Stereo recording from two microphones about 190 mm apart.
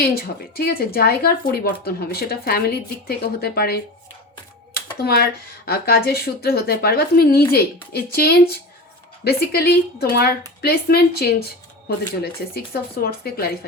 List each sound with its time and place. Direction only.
0.0 s speech: 55° left (ahead or behind)
4.9 s a woman's voice: 55° left (ahead or behind)